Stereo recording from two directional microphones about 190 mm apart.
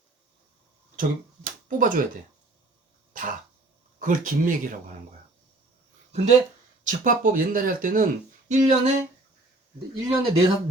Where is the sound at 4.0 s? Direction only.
45° right (ahead or behind).